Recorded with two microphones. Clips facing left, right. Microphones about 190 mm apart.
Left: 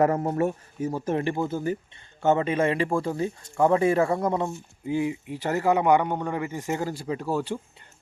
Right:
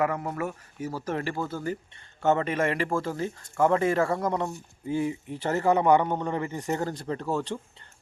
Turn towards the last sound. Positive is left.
turn(degrees=10)  # may be behind; listen again after turning